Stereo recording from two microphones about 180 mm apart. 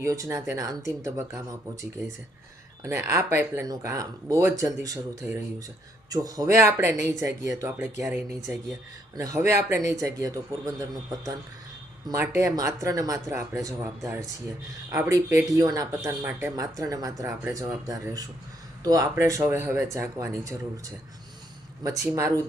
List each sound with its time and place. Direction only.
0.0 s speech: 20° right (ahead or behind)
21.8 s speech: 20° right (ahead or behind)